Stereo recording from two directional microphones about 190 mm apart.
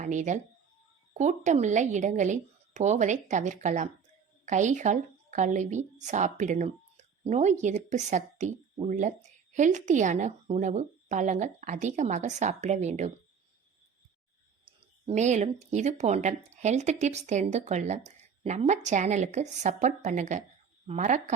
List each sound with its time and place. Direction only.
0.0 s a woman's voice: 40° right (ahead or behind)
14.6 s a woman's voice: 30° right (ahead or behind)